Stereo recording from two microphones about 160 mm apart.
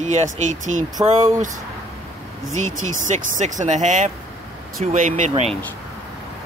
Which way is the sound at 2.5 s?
50° right (ahead or behind).